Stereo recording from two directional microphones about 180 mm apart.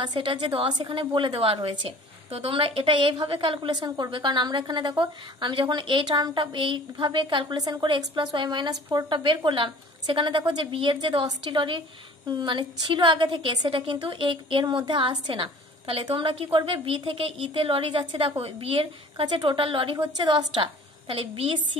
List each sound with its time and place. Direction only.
0.0 s a woman's voice: 25° right (ahead or behind)